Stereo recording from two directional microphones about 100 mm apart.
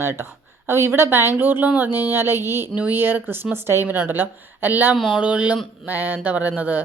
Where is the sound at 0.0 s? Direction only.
25° right (ahead or behind).